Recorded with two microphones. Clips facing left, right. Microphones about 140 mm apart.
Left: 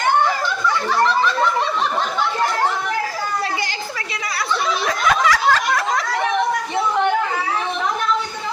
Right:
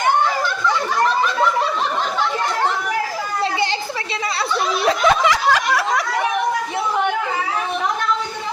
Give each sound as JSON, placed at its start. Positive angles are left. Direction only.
{"t": 4.9, "sound": "snicker", "side_deg": -25}